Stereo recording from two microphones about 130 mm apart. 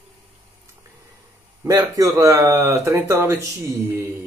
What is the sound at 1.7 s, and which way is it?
Speech, 25° right (ahead or behind).